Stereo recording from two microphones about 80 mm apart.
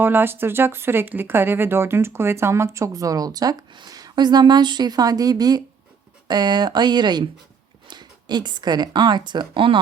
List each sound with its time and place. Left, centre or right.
0.0 s a woman's voice: right